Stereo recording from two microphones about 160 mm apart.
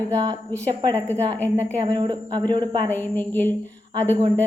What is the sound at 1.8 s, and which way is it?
Speech, 25° right (ahead or behind).